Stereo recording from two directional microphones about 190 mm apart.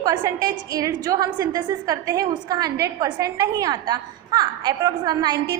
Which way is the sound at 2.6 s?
55° right (ahead or behind).